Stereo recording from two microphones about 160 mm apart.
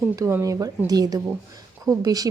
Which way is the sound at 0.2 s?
20° right (ahead or behind).